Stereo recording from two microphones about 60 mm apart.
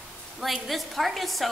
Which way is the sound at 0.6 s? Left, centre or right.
Centre.